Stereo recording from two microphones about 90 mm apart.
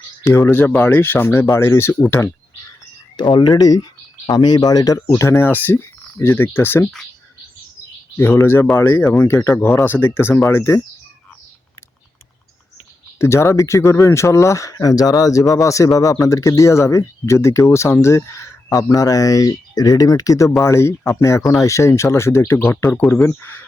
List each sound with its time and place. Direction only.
0.3 s speech: 30° left (ahead or behind)
3.2 s speech: 55° left (ahead or behind)
5.3 s speech: 25° left (ahead or behind)
8.1 s speech: 25° left (ahead or behind)
13.1 s speech: 30° left (ahead or behind)